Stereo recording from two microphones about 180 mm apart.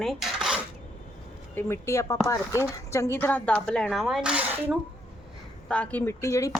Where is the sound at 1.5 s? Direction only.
15° left (ahead or behind); by 4.8 s 5° right (ahead or behind).